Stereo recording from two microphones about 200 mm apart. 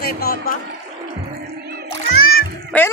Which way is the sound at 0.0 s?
50° left (ahead or behind).